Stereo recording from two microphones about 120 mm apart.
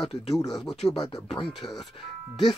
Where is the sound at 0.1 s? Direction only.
55° left (ahead or behind).